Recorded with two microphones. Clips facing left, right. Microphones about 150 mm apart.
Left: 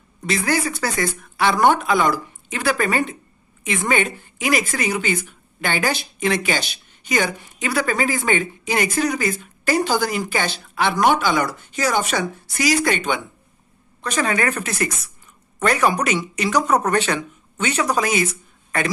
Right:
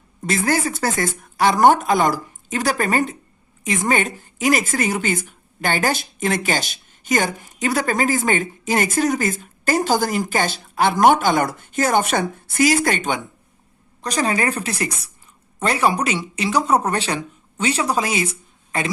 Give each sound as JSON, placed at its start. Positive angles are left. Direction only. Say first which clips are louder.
{"t": 0.3, "sound": "a woman's voice", "louder": "right 1 dB", "side_deg": -45}